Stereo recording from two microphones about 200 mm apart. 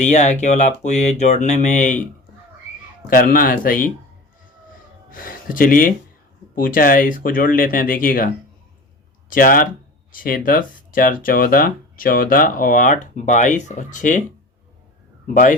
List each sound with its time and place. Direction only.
0.0 s speech: 35° left (ahead or behind)
3.1 s speech: 45° left (ahead or behind)
5.1 s speech: 45° left (ahead or behind)
9.3 s speech: 45° left (ahead or behind)
15.3 s speech: 40° left (ahead or behind)